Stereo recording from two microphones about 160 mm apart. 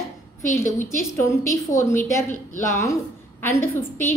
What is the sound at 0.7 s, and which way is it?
A woman's voice, 15° left (ahead or behind).